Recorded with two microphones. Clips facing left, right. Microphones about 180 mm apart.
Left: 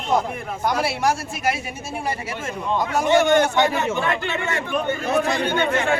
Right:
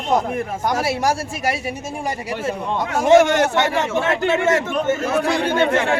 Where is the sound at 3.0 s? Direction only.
90° right.